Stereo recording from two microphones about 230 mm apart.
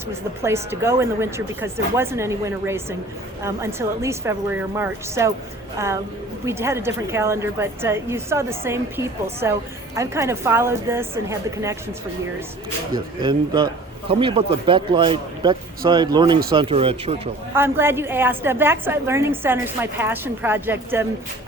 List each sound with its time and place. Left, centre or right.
0.4 s a woman's voice: centre
6.4 s a woman's voice: centre
12.9 s speech: centre
17.5 s a woman's voice: centre